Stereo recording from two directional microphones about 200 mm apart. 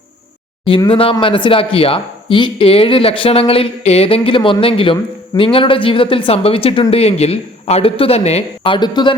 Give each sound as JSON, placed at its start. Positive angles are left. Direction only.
{"t": 0.6, "sound": "speech", "side_deg": 25}